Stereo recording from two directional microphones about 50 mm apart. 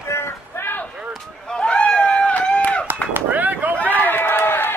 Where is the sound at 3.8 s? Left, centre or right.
Left.